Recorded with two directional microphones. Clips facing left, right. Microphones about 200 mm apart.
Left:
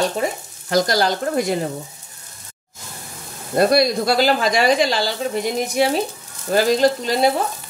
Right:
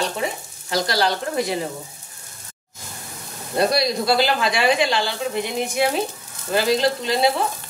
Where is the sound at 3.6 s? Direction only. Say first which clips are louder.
Left 4 dB; 50° left (ahead or behind).